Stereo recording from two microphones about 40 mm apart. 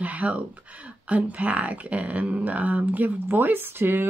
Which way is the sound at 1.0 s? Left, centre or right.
Right.